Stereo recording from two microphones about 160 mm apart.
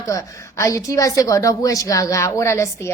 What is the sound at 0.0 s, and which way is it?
A woman's voice, 20° left (ahead or behind).